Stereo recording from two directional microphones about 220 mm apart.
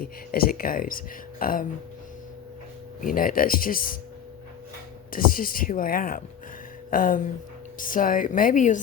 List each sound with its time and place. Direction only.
0.0 s speech: 40° left (ahead or behind)
3.0 s speech: 40° left (ahead or behind)
5.1 s speech: 40° left (ahead or behind)